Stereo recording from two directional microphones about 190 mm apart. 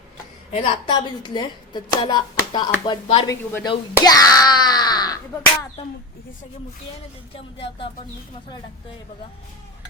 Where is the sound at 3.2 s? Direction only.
15° left (ahead or behind).